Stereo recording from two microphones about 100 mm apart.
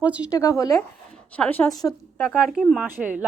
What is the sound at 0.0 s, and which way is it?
Speech, 15° right (ahead or behind).